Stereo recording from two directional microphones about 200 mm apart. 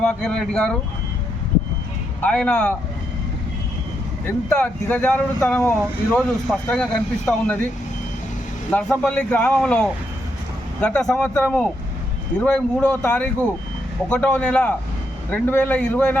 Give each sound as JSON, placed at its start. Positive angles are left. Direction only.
{"t": 0.0, "sound": "speech", "side_deg": 5}
{"t": 2.2, "sound": "speech", "side_deg": 5}
{"t": 4.4, "sound": "speech", "side_deg": 5}
{"t": 8.7, "sound": "speech", "side_deg": 5}